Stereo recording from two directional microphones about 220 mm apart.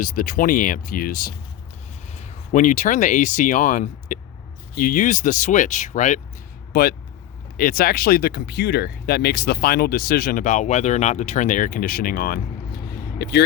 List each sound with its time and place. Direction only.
0.0 s speech: 40° left (ahead or behind)
2.5 s speech: 35° left (ahead or behind)
7.5 s speech: 40° left (ahead or behind)